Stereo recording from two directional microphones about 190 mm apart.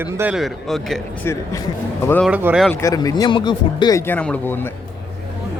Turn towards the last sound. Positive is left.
turn(degrees=10)  # may be behind; listen again after turning